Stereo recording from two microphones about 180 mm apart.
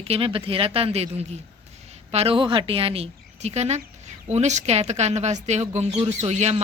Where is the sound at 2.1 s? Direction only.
35° right (ahead or behind).